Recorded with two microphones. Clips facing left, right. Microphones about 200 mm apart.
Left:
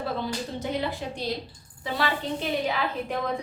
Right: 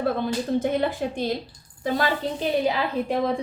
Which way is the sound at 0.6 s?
50° right (ahead or behind).